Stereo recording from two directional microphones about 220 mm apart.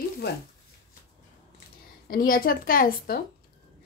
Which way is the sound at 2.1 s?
40° left (ahead or behind).